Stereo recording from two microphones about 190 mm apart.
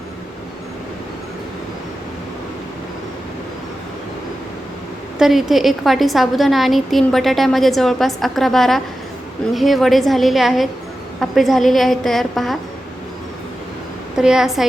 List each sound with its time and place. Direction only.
5.2 s a woman's voice: centre (ahead or behind)
14.2 s a woman's voice: 5° right (ahead or behind)